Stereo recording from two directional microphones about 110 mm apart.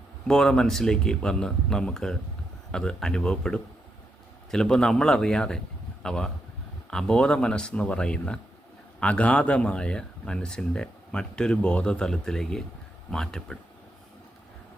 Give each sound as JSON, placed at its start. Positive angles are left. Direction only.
{"t": 0.3, "sound": "speech", "side_deg": 5}